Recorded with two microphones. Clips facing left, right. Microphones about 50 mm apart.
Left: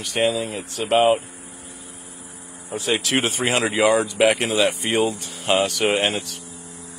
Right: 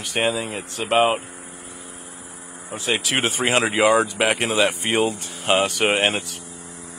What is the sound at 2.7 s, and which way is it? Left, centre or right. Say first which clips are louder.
Speech: left 1 dB; centre.